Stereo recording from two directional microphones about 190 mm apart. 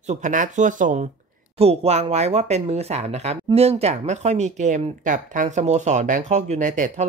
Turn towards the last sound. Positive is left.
turn(degrees=-40)  # may be behind; listen again after turning